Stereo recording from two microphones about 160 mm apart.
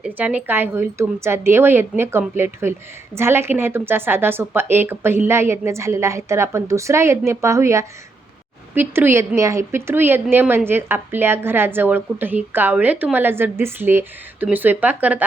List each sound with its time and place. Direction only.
0.0 s a woman's voice: 10° right (ahead or behind)